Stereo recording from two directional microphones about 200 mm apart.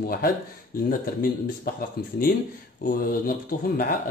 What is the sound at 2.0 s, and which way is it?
Speech, 50° left (ahead or behind).